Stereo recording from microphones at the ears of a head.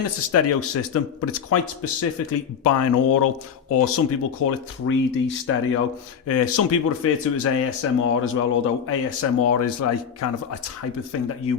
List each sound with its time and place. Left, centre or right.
0.0 s speech: left